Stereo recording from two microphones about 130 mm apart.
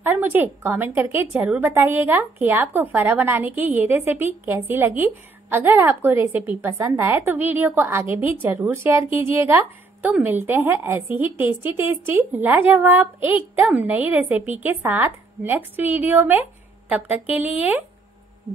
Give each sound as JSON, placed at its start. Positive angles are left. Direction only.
{"t": 0.0, "sound": "a woman's voice", "side_deg": -15}